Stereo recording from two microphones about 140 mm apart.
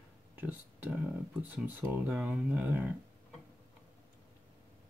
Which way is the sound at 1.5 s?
10° right (ahead or behind).